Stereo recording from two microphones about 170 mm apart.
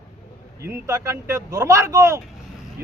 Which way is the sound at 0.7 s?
15° right (ahead or behind).